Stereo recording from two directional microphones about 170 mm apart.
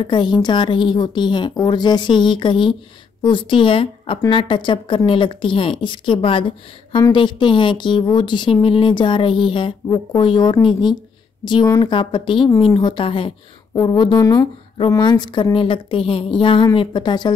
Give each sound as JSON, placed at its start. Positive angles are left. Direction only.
{"t": 0.0, "sound": "a woman's voice", "side_deg": 25}